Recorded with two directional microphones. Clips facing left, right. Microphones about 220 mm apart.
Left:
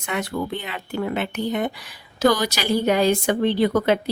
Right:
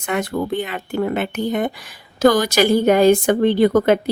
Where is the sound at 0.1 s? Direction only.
45° right (ahead or behind).